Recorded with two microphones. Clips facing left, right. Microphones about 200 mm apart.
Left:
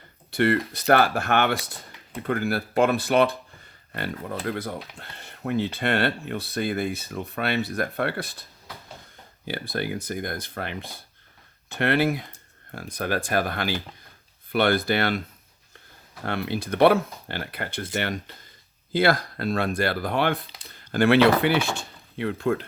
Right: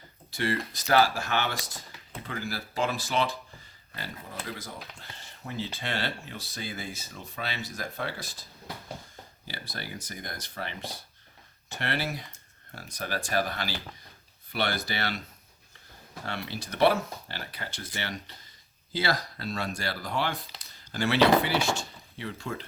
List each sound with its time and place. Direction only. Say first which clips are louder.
0.3 s speech: left 8 dB; 60° left (ahead or behind)
9.5 s speech: left 11 dB; 55° left (ahead or behind)
16.2 s speech: left 8 dB; 55° left (ahead or behind)